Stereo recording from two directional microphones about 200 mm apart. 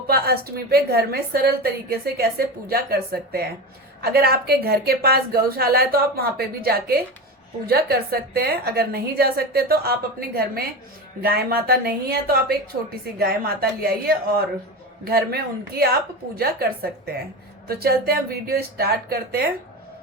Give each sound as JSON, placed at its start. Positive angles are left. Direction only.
{"t": 0.1, "sound": "a woman's voice", "side_deg": -50}